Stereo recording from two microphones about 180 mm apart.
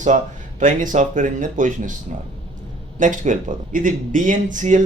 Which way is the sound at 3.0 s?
45° right (ahead or behind).